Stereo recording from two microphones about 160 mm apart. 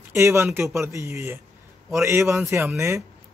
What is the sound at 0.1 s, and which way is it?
Speech, 15° right (ahead or behind).